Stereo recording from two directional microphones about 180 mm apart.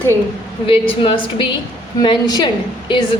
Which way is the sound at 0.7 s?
30° left (ahead or behind).